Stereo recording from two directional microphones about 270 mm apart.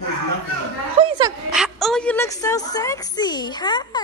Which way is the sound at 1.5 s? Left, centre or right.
Centre.